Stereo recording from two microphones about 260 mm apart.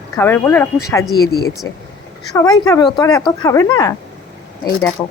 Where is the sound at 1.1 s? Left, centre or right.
Left.